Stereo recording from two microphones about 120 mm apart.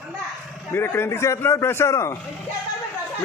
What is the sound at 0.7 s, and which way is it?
A man's voice, 20° left (ahead or behind).